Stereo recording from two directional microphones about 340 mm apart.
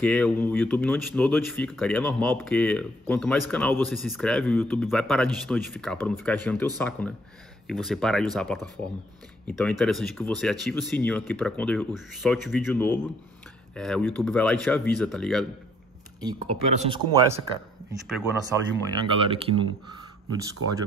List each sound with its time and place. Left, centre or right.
0.0 s speech: centre
16.3 s speech: centre
18.9 s speech: centre
20.6 s speech: right